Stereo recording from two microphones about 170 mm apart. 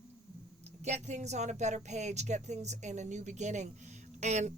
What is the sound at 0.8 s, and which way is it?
Speech, 40° right (ahead or behind).